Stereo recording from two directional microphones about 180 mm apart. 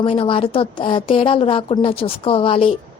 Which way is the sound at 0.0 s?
30° left (ahead or behind).